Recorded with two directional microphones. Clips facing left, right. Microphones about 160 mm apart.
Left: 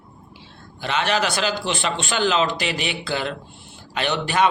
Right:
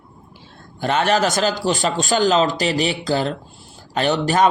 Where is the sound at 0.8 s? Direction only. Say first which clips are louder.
Right 5 dB; 45° right (ahead or behind).